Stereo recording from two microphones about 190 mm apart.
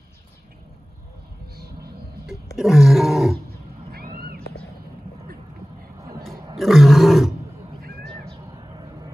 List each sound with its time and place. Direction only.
2.5 s roaring cats: centre (ahead or behind)
3.9 s cat: 50° right (ahead or behind)
6.5 s roar: centre (ahead or behind)
8.3 s a sound: 25° right (ahead or behind)